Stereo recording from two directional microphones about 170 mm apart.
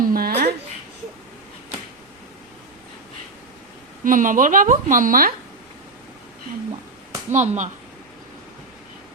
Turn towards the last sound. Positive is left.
turn(degrees=-45)  # may be behind; listen again after turning